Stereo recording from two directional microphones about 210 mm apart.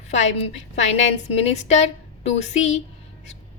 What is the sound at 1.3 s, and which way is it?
A woman's voice, 30° left (ahead or behind).